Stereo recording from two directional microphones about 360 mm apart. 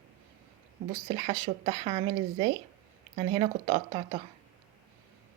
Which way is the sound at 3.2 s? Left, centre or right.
Centre.